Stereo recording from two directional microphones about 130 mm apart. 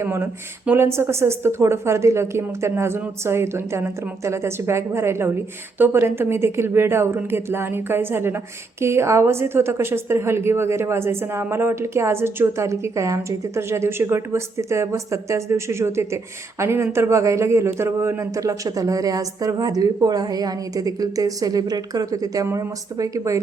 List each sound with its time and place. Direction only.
0.0 s a woman's voice: 20° right (ahead or behind)